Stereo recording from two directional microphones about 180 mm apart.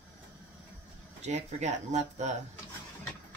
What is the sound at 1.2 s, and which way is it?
Speech, 40° right (ahead or behind).